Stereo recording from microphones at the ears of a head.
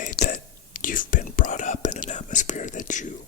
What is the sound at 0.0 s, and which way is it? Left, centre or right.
Whispering, left.